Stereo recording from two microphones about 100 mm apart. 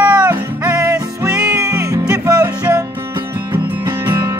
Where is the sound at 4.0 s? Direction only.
25° right (ahead or behind).